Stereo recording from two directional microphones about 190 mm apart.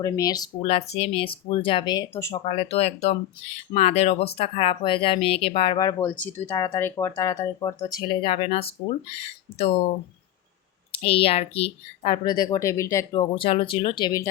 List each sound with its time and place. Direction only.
0.0 s speech: 20° left (ahead or behind)
2.3 s speech: 35° left (ahead or behind)
10.9 s speech: 30° left (ahead or behind)
13.3 s speech: 30° left (ahead or behind)